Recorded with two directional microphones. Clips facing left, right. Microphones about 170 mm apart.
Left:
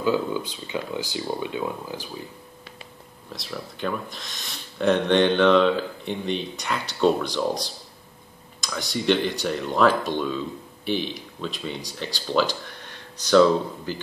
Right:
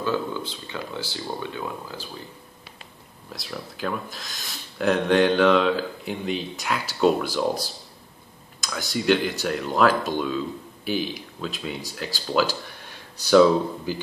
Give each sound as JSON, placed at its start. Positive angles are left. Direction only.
{"t": 0.0, "sound": "speech", "side_deg": 15}
{"t": 3.3, "sound": "speech", "side_deg": 0}